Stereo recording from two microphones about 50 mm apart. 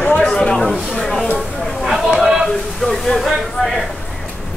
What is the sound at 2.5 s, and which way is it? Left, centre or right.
Speech, centre.